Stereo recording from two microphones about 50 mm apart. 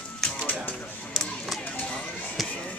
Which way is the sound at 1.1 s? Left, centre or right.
Centre.